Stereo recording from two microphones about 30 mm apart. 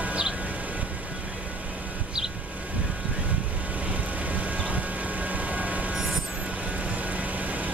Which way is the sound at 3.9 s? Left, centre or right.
Right.